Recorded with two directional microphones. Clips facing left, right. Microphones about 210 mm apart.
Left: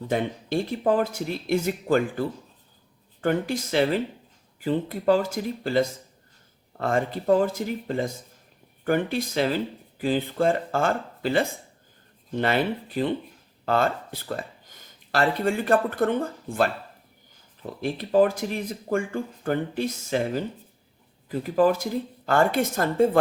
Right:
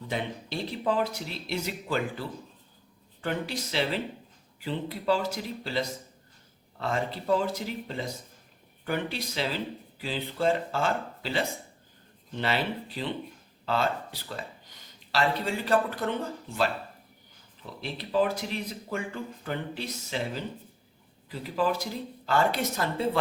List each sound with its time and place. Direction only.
0.1 s speech: 50° left (ahead or behind)